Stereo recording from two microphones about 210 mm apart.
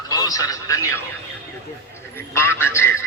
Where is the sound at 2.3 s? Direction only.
10° left (ahead or behind).